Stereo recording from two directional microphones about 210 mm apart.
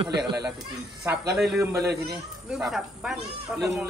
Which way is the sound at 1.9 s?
50° right (ahead or behind).